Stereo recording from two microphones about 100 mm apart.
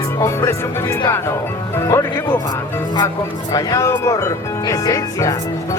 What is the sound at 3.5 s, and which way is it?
Speech, 30° left (ahead or behind).